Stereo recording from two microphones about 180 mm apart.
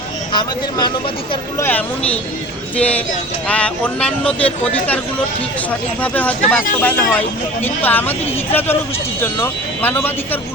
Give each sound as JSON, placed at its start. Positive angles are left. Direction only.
{"t": 0.3, "sound": "speech", "side_deg": 25}
{"t": 1.6, "sound": "speech", "side_deg": 10}
{"t": 6.0, "sound": "speech", "side_deg": 10}